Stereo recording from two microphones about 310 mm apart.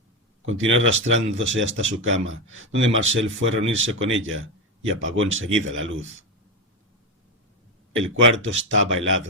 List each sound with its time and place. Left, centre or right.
0.4 s speech: right
7.9 s speech: right